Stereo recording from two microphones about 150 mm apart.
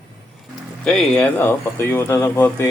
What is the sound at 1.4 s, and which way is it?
Speech, 20° left (ahead or behind).